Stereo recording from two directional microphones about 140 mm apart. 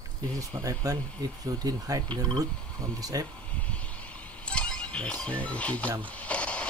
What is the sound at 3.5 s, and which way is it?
Music, 10° left (ahead or behind).